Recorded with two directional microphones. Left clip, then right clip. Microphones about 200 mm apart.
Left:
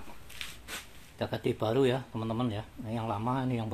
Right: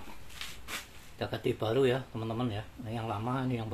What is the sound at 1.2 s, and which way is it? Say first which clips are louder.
Speech: left 1 dB; 40° left (ahead or behind).